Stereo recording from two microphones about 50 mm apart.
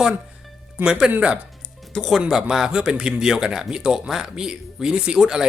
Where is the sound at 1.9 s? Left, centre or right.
Centre.